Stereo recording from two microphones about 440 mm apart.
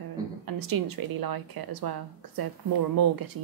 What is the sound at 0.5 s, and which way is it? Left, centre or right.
A woman's voice, right.